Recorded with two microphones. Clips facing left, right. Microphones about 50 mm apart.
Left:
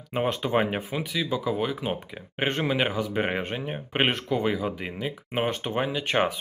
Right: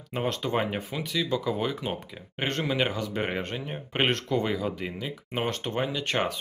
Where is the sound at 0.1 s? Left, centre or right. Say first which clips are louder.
Left 3 dB; centre.